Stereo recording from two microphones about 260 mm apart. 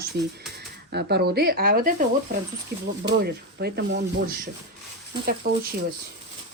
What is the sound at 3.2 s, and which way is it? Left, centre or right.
Speech, right.